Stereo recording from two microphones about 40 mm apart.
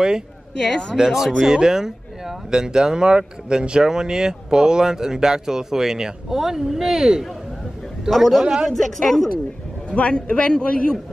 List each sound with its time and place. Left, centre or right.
0.6 s a man's voice: centre
0.9 s a woman's voice: centre
8.7 s a woman's voice: centre
9.8 s a man's voice: left